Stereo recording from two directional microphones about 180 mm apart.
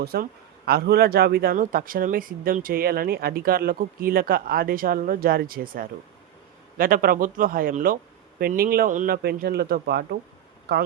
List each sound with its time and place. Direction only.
0.0 s a man's voice: 60° right (ahead or behind)
9.1 s speech: 60° right (ahead or behind)